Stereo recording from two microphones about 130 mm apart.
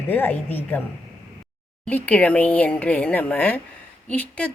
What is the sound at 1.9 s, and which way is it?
Speech, 10° left (ahead or behind).